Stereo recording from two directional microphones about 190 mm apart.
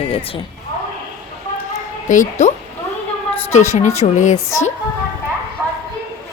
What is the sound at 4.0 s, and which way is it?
Speech, 40° left (ahead or behind).